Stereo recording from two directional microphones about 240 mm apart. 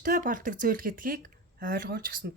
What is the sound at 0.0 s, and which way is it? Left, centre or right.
Speech, right.